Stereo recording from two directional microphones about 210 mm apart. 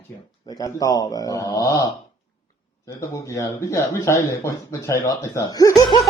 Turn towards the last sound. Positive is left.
turn(degrees=20)  # may be behind; listen again after turning